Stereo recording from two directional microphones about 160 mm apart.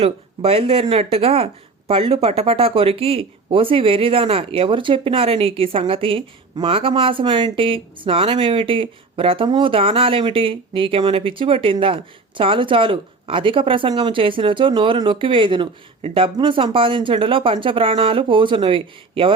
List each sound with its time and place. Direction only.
0.0 s speech: 35° right (ahead or behind)